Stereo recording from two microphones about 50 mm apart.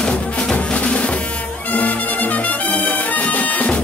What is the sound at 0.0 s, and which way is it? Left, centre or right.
Music, centre.